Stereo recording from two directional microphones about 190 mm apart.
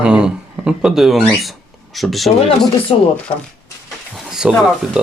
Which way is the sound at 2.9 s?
30° left (ahead or behind).